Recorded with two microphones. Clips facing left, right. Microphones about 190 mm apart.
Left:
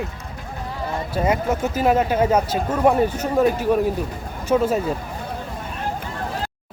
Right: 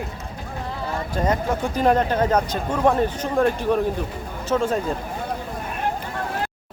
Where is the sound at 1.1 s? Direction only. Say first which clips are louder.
Left 2 dB; 10° left (ahead or behind).